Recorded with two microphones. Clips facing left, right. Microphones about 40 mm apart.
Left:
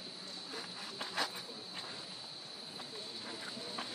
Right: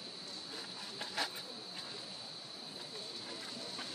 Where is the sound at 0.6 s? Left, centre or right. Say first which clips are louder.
Left 2 dB; centre.